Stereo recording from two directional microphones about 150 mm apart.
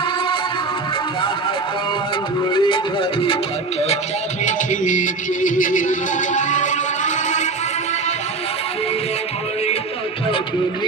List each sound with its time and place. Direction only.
2.5 s music: 35° left (ahead or behind)
4.4 s music: 55° left (ahead or behind)